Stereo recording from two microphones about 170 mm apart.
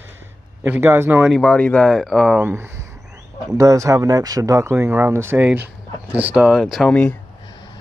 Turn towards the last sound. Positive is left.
turn(degrees=5)  # may be behind; listen again after turning